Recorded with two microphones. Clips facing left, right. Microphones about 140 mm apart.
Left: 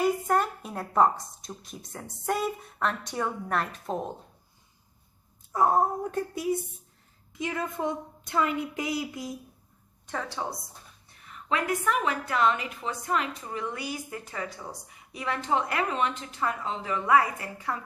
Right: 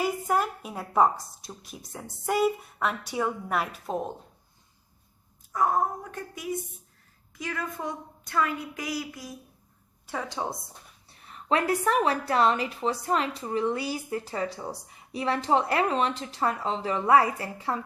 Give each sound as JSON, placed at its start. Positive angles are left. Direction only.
{"t": 0.0, "sound": "speech", "side_deg": 0}
{"t": 5.5, "sound": "a woman's voice", "side_deg": 30}
{"t": 10.1, "sound": "speech", "side_deg": -15}
{"t": 11.3, "sound": "a woman's voice", "side_deg": -35}